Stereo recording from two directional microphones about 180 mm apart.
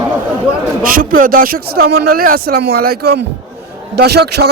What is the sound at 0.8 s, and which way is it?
Speech, 50° right (ahead or behind).